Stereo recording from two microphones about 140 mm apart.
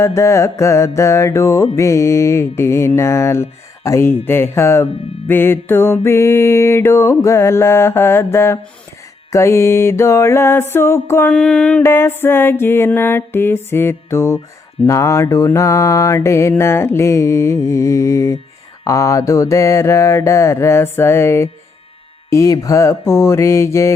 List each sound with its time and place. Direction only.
0.0 s mantra: 20° left (ahead or behind)
11.8 s mantra: 20° left (ahead or behind)